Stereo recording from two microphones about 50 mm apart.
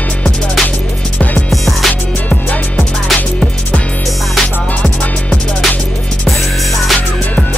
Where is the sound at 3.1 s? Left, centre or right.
Left.